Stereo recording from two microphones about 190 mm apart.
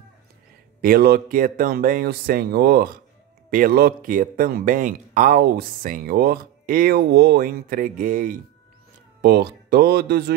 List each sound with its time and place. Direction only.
0.7 s speech: 55° right (ahead or behind)
9.2 s speech: 55° right (ahead or behind)